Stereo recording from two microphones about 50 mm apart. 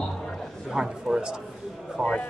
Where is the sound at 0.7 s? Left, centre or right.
Centre.